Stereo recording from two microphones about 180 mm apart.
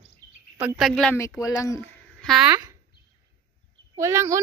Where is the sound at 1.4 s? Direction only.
20° left (ahead or behind).